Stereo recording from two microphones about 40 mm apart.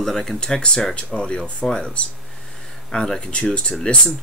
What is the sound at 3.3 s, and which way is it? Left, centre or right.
Speech, left.